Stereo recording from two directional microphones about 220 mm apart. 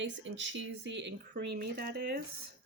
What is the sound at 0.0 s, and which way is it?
Speech, 55° right (ahead or behind).